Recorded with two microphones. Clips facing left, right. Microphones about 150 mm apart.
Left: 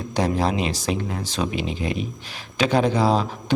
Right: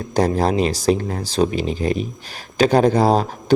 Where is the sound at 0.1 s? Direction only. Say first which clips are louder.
Right 4 dB; 40° right (ahead or behind).